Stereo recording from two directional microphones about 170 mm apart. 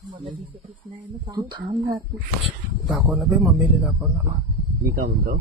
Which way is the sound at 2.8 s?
Centre (ahead or behind).